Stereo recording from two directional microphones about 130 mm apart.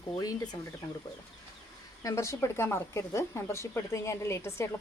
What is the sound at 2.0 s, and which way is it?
A woman's voice, 20° left (ahead or behind).